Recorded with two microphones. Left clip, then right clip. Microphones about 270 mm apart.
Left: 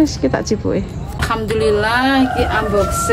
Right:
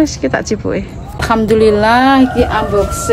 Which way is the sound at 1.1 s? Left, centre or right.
Right.